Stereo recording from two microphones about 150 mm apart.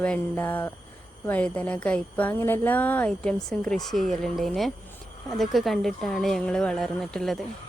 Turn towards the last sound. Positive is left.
turn(degrees=0)  # may be behind; listen again after turning